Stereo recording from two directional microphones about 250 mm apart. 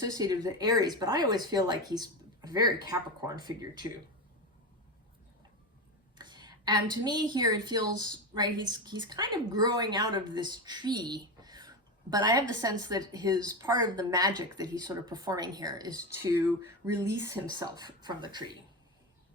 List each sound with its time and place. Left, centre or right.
0.0 s a woman's voice: centre
6.1 s a woman's voice: centre
17.0 s a woman's voice: centre